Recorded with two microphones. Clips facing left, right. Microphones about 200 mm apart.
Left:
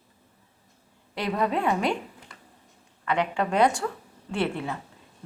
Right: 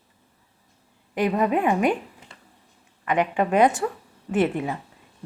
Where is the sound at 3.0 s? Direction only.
15° right (ahead or behind).